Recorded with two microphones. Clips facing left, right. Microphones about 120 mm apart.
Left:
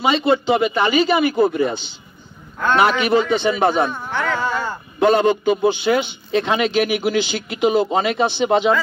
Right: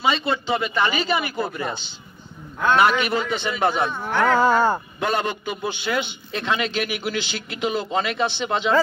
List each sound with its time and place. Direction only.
0.0 s speech: 20° left (ahead or behind)
3.9 s speech: 5° right (ahead or behind)
4.4 s a sound: 45° right (ahead or behind)
5.0 s a man's voice: 25° left (ahead or behind)